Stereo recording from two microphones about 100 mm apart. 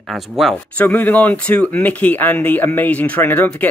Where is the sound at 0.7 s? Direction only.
15° left (ahead or behind).